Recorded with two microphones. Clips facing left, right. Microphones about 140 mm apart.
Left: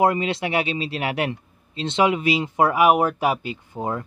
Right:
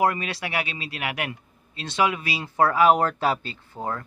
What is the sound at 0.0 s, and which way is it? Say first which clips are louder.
Speech: left 4 dB; 25° left (ahead or behind).